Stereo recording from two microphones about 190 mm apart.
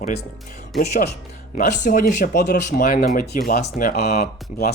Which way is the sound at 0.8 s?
55° left (ahead or behind).